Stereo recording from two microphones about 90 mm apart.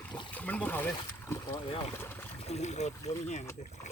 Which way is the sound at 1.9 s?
25° left (ahead or behind).